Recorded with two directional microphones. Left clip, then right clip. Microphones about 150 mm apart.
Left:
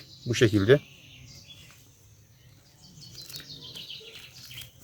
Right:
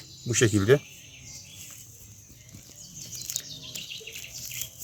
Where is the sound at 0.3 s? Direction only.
30° left (ahead or behind).